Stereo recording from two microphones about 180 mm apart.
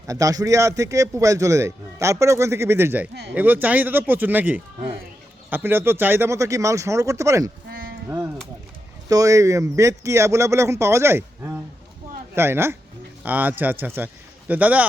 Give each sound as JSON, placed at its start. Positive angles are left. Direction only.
{"t": 0.1, "sound": "speech", "side_deg": -20}
{"t": 7.7, "sound": "sheep", "side_deg": -55}
{"t": 9.0, "sound": "speech", "side_deg": -20}